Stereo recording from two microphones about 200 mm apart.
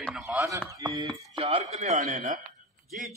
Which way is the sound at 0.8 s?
20° right (ahead or behind).